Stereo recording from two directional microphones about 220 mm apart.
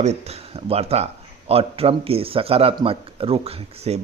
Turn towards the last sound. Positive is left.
turn(degrees=-25)  # may be behind; listen again after turning